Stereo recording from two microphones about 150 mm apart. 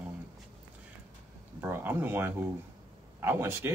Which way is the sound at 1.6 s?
15° right (ahead or behind).